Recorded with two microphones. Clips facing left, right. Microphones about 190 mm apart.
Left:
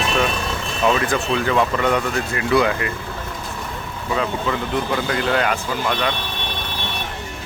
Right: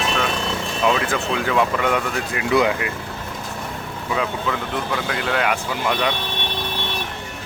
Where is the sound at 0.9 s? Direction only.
Centre (ahead or behind).